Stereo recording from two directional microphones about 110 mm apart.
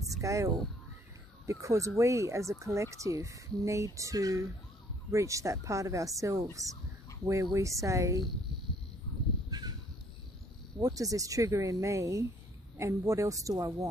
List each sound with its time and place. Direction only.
0.2 s speech: 30° right (ahead or behind)
9.5 s a sound: 40° right (ahead or behind)
10.8 s speech: 30° right (ahead or behind)